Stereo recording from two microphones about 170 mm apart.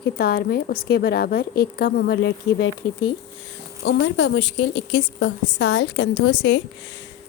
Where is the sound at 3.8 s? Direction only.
90° left.